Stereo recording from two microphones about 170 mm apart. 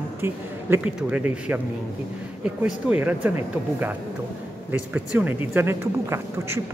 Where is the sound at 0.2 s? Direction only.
10° right (ahead or behind).